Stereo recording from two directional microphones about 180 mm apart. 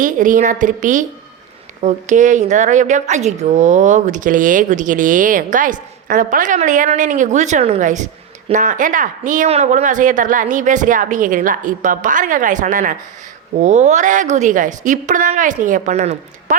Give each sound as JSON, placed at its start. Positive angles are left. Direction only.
{"t": 0.0, "sound": "speech", "side_deg": -45}